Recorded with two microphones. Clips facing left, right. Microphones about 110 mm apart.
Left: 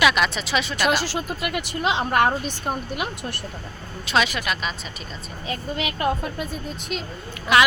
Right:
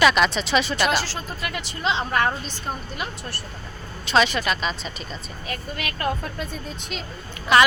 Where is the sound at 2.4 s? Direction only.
10° left (ahead or behind).